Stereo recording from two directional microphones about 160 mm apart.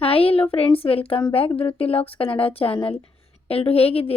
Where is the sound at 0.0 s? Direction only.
35° left (ahead or behind).